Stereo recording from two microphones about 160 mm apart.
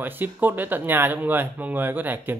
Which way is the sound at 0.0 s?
10° right (ahead or behind).